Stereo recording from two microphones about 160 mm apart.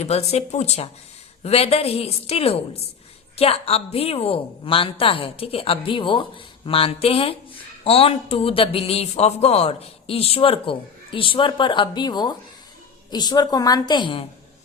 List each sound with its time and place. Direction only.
0.0 s a woman's voice: 40° left (ahead or behind)